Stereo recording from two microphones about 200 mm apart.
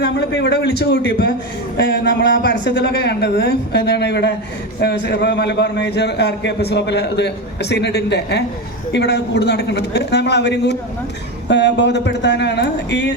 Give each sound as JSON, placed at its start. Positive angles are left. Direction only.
{"t": 0.0, "sound": "a man's voice", "side_deg": 55}